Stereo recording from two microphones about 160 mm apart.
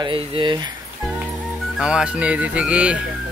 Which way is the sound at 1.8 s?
5° right (ahead or behind).